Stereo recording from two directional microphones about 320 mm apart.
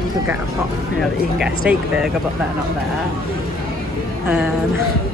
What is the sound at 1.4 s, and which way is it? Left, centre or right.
Speech, centre.